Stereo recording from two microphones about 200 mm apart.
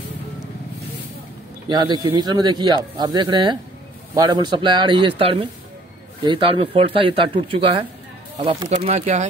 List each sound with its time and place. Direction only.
1.7 s speech: 25° right (ahead or behind)
8.6 s speech: 35° right (ahead or behind)